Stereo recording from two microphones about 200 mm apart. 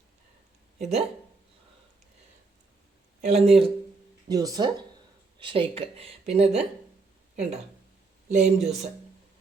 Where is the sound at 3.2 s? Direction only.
30° right (ahead or behind).